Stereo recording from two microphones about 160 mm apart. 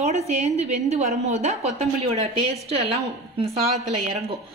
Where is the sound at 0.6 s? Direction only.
45° right (ahead or behind).